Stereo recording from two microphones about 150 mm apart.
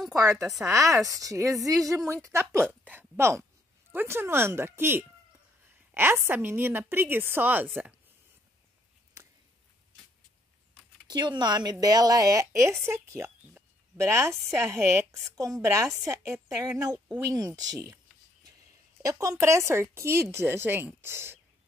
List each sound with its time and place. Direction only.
0.4 s a woman's voice: centre (ahead or behind)
0.7 s a woman's voice: 20° right (ahead or behind)
11.1 s a woman's voice: 30° right (ahead or behind)
19.0 s a woman's voice: 20° right (ahead or behind)